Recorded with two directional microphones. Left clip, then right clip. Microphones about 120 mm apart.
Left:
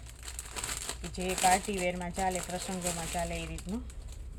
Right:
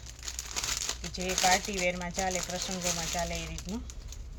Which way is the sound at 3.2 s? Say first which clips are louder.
Right 1 dB; 5° left (ahead or behind).